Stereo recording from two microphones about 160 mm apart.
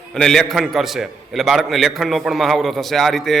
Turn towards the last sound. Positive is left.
turn(degrees=0)  # may be behind; listen again after turning